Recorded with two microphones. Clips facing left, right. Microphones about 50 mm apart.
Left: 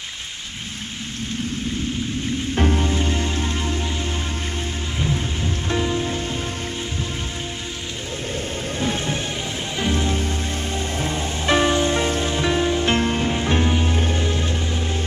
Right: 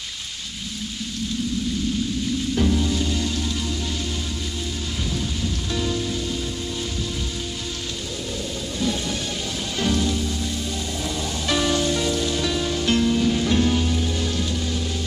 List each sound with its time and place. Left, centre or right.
2.5 s music: left
5.0 s rain on surface: left
8.7 s music: left
11.0 s rain on surface: left